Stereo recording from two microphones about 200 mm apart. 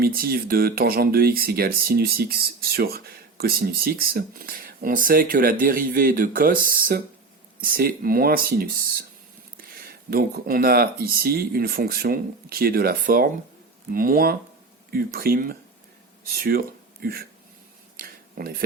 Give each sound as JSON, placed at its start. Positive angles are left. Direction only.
{"t": 0.0, "sound": "speech", "side_deg": -50}
{"t": 9.7, "sound": "speech", "side_deg": -50}
{"t": 17.9, "sound": "a sound", "side_deg": -45}